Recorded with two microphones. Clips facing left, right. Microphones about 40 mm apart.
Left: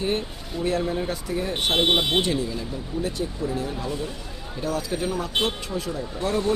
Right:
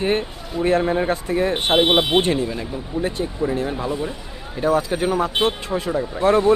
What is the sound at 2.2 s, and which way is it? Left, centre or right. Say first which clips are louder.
Speech: right 4 dB; right.